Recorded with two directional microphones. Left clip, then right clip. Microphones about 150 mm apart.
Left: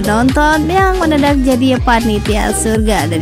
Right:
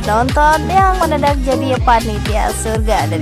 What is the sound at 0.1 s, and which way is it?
Speech, 25° left (ahead or behind).